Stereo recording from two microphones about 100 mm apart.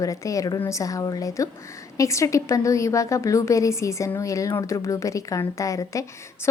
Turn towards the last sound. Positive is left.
turn(degrees=35)  # may be behind; listen again after turning